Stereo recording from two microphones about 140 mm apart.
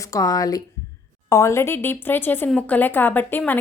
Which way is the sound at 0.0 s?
25° left (ahead or behind).